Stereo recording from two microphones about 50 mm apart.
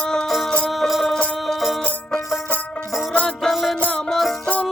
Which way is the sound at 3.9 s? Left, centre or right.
Centre.